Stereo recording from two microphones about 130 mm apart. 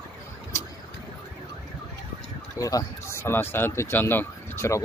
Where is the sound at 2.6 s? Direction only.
25° left (ahead or behind).